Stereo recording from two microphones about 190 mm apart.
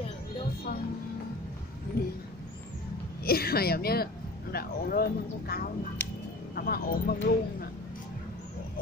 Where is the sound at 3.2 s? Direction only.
55° left (ahead or behind).